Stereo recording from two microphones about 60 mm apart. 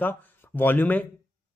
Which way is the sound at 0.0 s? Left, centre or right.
Left.